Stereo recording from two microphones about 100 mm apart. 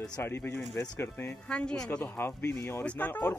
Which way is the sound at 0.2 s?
25° left (ahead or behind).